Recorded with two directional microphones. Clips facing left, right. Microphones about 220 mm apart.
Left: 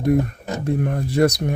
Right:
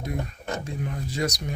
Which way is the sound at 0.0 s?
55° left (ahead or behind).